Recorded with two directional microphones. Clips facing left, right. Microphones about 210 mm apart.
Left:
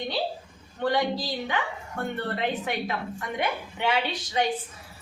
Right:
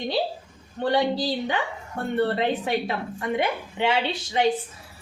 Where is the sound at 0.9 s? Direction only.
30° right (ahead or behind).